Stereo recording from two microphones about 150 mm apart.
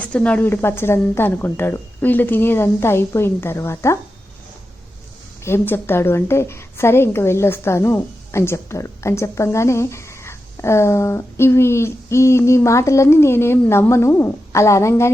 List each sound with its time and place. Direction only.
0.0 s a woman's voice: 10° left (ahead or behind)
5.5 s a woman's voice: 15° left (ahead or behind)